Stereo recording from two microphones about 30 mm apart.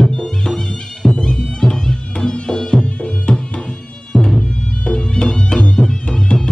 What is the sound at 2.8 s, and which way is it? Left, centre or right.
Music, left.